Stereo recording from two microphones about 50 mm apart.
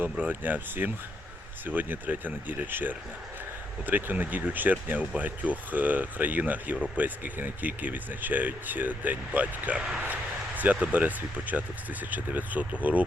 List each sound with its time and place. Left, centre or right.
0.2 s speech: right